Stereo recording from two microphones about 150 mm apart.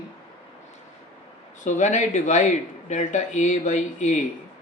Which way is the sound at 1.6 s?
55° left (ahead or behind).